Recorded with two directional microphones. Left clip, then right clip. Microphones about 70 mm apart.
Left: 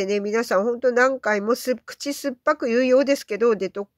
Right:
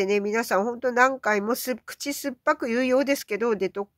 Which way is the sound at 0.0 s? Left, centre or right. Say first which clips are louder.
Left 1 dB; left.